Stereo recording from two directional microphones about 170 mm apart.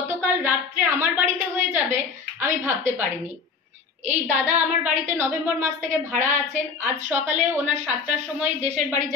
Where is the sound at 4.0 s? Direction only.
45° right (ahead or behind).